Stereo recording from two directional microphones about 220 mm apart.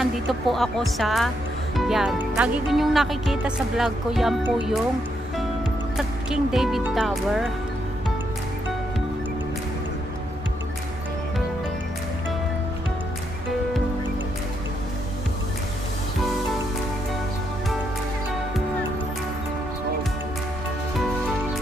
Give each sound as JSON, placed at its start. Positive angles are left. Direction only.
{"t": 0.0, "sound": "speech", "side_deg": 0}
{"t": 5.9, "sound": "speech", "side_deg": 0}